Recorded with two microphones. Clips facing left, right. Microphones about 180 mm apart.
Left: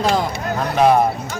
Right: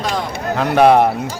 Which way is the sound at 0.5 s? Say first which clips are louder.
Right 4 dB; 70° right (ahead or behind).